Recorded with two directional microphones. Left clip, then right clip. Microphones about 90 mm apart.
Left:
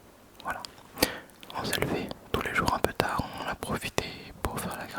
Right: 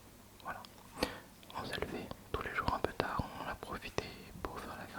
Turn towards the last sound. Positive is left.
turn(degrees=50)  # may be behind; listen again after turning